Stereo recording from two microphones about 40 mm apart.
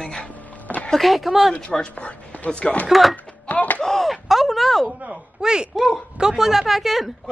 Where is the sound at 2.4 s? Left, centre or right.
Left.